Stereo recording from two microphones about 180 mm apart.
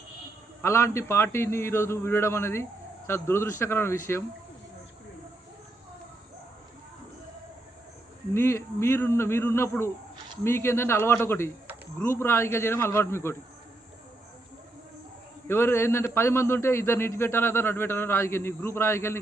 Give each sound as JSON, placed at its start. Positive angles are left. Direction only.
{"t": 0.6, "sound": "a man's voice", "side_deg": 15}
{"t": 8.3, "sound": "a man's voice", "side_deg": 15}
{"t": 15.4, "sound": "a man's voice", "side_deg": 15}